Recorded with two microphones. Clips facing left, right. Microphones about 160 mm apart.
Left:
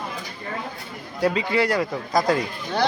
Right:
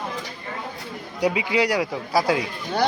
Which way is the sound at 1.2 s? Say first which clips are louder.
Even; 10° right (ahead or behind).